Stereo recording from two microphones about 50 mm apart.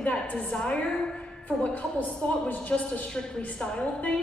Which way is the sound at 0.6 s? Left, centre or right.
Centre.